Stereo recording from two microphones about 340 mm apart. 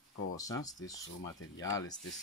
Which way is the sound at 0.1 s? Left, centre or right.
Left.